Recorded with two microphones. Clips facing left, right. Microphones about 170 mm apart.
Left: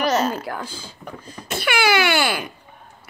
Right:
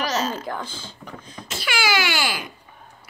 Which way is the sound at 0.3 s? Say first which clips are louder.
Left 2 dB; 10° left (ahead or behind).